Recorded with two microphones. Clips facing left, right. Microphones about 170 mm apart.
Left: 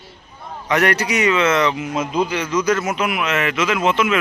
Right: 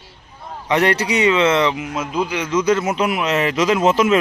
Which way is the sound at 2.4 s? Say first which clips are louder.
Right 2 dB; 25° right (ahead or behind).